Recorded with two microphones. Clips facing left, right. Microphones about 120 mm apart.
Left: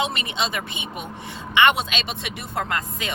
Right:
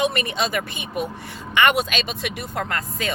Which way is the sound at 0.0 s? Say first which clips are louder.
Right 3 dB; 25° left (ahead or behind).